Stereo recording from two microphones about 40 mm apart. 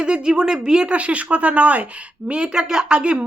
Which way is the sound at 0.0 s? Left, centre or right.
Right.